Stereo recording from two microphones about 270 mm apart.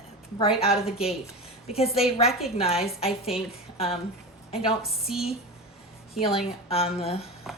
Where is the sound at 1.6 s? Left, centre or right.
Left.